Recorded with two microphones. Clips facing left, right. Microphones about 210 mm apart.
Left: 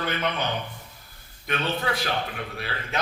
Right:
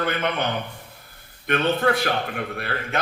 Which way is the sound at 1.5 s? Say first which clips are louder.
Right 7 dB; 55° right (ahead or behind).